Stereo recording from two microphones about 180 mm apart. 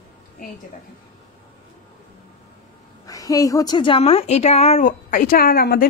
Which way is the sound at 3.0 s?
20° left (ahead or behind).